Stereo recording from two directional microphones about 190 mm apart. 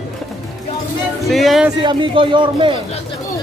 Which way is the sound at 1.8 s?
25° right (ahead or behind).